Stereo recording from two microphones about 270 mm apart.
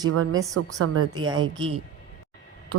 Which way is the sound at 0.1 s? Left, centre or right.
Right.